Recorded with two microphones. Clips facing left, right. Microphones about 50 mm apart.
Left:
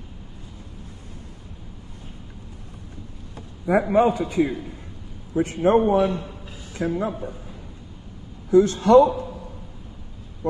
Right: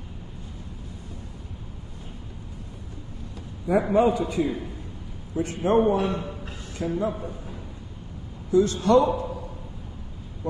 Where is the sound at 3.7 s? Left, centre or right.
Left.